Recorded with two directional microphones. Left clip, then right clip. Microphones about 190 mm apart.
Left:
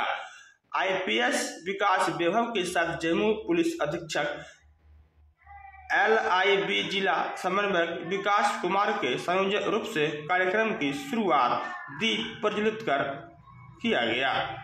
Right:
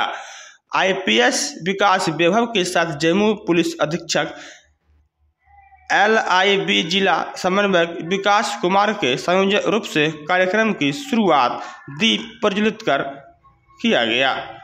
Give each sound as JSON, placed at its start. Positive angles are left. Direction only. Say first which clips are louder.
{"t": 0.3, "sound": "a man's voice", "louder": "right 10 dB", "side_deg": -50}
{"t": 5.9, "sound": "a man's voice", "louder": "right 8 dB", "side_deg": -50}